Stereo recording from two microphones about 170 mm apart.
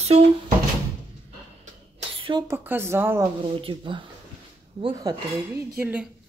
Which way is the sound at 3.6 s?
30° right (ahead or behind).